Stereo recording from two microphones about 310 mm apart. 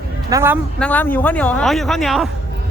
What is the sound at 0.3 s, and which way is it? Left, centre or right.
Speech, centre.